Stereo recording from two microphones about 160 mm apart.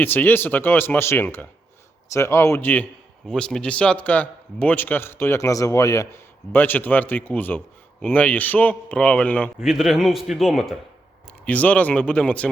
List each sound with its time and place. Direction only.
0.0 s a man's voice: 10° left (ahead or behind)
9.6 s a man's voice: centre (ahead or behind)